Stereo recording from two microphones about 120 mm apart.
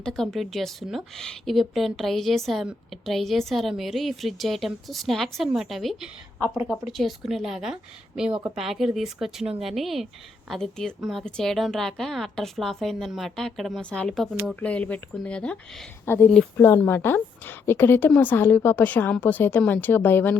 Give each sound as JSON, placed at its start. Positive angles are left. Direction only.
{"t": 0.0, "sound": "a woman's voice", "side_deg": 5}
{"t": 16.0, "sound": "a woman's voice", "side_deg": 20}